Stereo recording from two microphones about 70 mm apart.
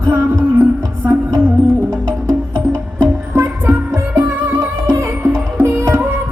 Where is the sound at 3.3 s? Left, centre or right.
Right.